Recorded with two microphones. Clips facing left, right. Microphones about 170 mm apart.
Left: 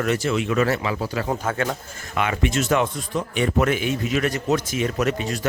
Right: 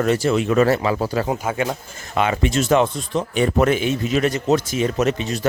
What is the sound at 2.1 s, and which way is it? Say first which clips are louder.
Speech: right 3 dB; 30° right (ahead or behind).